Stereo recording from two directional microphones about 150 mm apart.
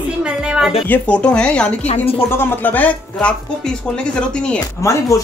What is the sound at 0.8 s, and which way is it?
Speech, 10° left (ahead or behind).